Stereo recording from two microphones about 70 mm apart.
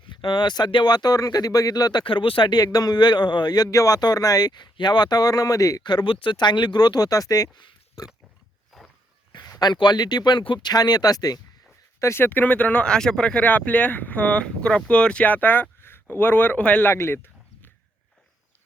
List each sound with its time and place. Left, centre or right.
0.2 s speech: left
2.4 s a man's voice: left
3.7 s speech: left
5.8 s speech: left
8.7 s a sound: centre
9.3 s speech: left
11.9 s speech: left
12.2 s speech: left
13.4 s speech: left
16.9 s a sound: left